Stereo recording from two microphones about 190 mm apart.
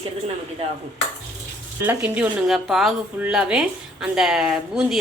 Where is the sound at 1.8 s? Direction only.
10° right (ahead or behind).